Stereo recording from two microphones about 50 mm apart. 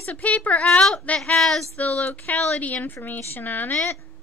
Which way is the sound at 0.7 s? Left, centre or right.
Centre.